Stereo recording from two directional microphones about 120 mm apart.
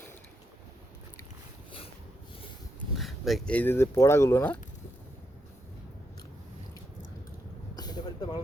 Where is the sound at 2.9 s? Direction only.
Centre (ahead or behind).